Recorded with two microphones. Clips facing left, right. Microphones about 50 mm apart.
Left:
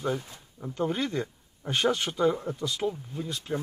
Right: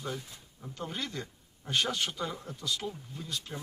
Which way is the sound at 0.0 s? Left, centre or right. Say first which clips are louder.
Left 8 dB; left.